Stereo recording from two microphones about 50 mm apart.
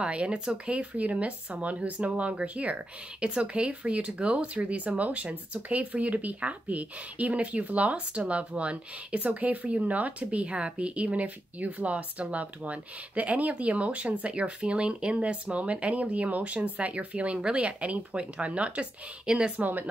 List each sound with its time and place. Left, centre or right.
0.0 s speech: right
19.5 s speech: right